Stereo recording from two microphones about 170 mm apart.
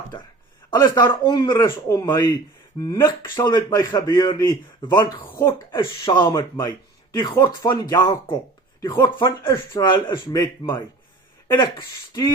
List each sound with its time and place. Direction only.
0.7 s speech: 25° left (ahead or behind)
5.7 s speech: 25° left (ahead or behind)
9.0 s speech: 30° left (ahead or behind)